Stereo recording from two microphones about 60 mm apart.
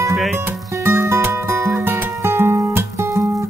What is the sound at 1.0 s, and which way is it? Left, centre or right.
Music, right.